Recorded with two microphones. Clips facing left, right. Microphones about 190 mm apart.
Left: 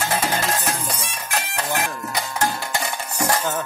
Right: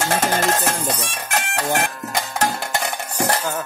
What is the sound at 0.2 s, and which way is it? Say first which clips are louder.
Music: right 4 dB; 50° right (ahead or behind).